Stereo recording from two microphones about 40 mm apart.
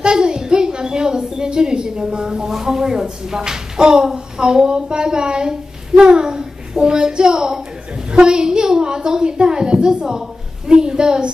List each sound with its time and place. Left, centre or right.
0.0 s a woman's voice: right